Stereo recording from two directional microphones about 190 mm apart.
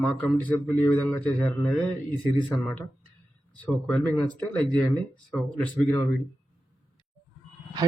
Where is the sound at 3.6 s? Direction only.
5° left (ahead or behind).